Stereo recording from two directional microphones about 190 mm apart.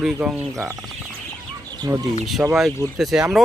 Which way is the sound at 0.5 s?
15° right (ahead or behind).